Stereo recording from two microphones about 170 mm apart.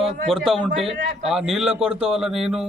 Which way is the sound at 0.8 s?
Centre (ahead or behind).